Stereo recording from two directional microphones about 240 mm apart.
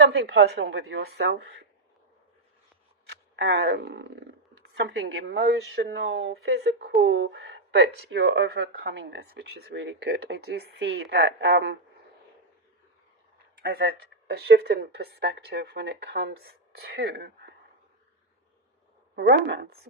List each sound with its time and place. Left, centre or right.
0.0 s speech: right
3.3 s speech: right
13.6 s speech: right
19.3 s speech: right